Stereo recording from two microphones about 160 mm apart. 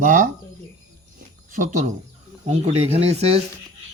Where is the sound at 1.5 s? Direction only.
50° right (ahead or behind).